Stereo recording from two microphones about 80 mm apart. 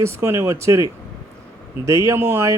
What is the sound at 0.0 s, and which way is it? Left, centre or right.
Speech, right.